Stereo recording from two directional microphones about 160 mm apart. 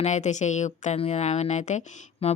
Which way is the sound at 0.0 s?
45° left (ahead or behind).